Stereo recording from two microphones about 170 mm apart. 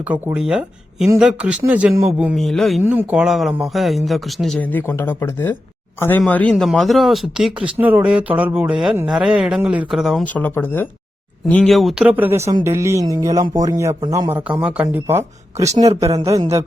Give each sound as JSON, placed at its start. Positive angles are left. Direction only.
{"t": 0.0, "sound": "speech", "side_deg": -10}
{"t": 2.8, "sound": "speech", "side_deg": -10}